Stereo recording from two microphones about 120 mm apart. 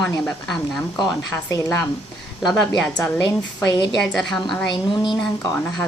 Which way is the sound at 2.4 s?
5° left (ahead or behind).